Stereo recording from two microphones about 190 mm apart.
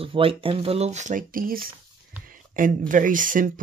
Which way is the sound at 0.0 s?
30° right (ahead or behind).